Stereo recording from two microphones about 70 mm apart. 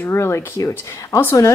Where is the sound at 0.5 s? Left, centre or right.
Left.